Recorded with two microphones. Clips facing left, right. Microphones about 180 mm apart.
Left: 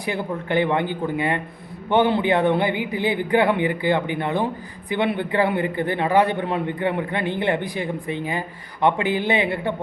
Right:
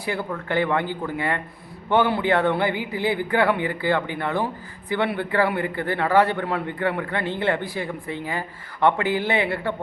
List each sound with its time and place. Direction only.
0.0 s a man's voice: 20° left (ahead or behind)